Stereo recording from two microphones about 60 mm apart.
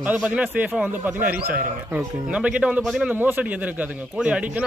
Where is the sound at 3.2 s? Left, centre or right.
Right.